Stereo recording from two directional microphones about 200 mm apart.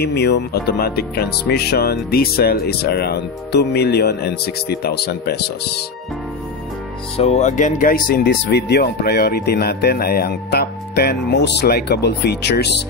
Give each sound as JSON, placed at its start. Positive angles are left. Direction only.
{"t": 0.0, "sound": "speech", "side_deg": 55}
{"t": 7.2, "sound": "speech", "side_deg": 30}